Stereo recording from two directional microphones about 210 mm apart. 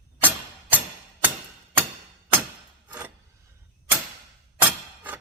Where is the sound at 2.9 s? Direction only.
5° right (ahead or behind).